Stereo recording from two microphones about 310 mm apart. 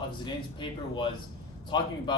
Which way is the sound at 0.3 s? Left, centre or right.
Centre.